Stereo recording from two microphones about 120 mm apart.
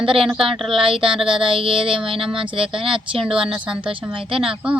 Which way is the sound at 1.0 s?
45° right (ahead or behind).